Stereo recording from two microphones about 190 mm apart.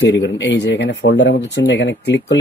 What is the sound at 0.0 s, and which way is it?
Speech, 80° left.